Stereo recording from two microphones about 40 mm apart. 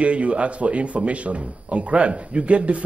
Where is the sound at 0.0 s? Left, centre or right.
Right.